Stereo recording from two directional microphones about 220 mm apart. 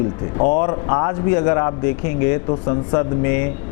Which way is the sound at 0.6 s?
20° left (ahead or behind).